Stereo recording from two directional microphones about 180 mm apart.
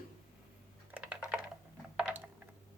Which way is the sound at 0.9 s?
10° right (ahead or behind).